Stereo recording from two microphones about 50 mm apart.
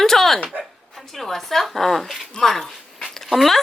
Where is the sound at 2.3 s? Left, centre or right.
Centre.